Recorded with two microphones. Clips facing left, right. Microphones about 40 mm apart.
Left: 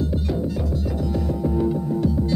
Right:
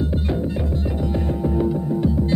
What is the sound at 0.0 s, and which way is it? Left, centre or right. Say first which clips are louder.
Music: right 1 dB; right.